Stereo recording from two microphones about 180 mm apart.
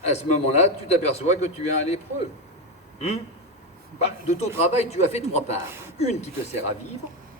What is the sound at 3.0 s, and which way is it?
A man's voice, 40° left (ahead or behind).